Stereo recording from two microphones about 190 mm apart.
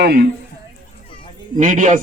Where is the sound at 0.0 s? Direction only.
55° right (ahead or behind).